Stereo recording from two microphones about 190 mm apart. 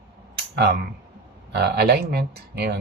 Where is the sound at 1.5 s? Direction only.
60° right (ahead or behind).